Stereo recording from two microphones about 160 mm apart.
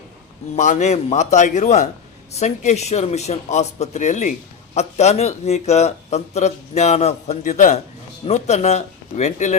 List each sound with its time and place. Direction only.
0.5 s a man's voice: 50° left (ahead or behind)